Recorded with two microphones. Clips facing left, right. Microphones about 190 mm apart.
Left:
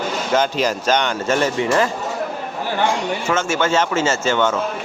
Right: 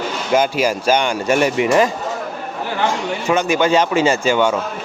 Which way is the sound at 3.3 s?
15° right (ahead or behind).